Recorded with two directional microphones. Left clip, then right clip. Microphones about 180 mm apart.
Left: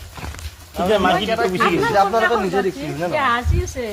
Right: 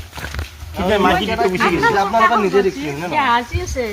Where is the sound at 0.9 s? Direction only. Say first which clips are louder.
Right 2 dB; 20° left (ahead or behind).